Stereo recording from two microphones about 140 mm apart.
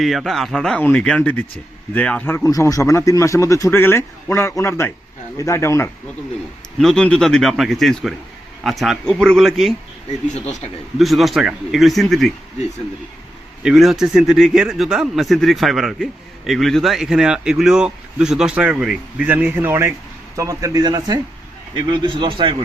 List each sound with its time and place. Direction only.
0.0 s a man's voice: centre (ahead or behind); by 5.9 s 20° left (ahead or behind)
6.7 s a man's voice: 5° left (ahead or behind)
10.9 s a man's voice: centre (ahead or behind)
13.6 s a man's voice: 5° right (ahead or behind); by 22.5 s 35° right (ahead or behind)